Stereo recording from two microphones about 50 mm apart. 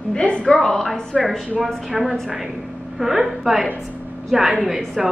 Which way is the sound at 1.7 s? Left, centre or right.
Centre.